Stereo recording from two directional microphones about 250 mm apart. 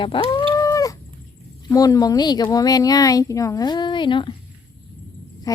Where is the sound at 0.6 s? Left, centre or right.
Centre.